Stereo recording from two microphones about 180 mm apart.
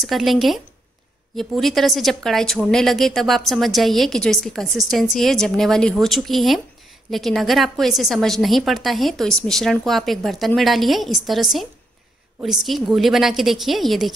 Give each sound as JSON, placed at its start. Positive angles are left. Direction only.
{"t": 0.0, "sound": "a woman's voice", "side_deg": 0}